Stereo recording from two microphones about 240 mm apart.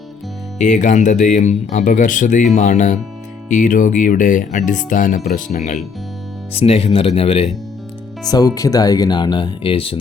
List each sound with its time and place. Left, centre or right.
0.6 s speech: left